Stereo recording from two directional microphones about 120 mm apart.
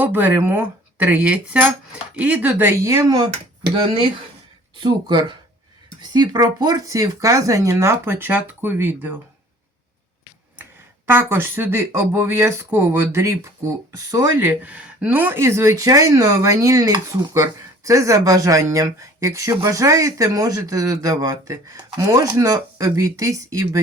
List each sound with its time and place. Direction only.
0.0 s speech: 15° right (ahead or behind)
2.8 s speech: 30° right (ahead or behind)
4.8 s speech: 40° right (ahead or behind); by 9.1 s 15° right (ahead or behind)
10.6 s speech: 20° right (ahead or behind)
14.4 s speech: 10° right (ahead or behind); by 23.6 s 30° right (ahead or behind)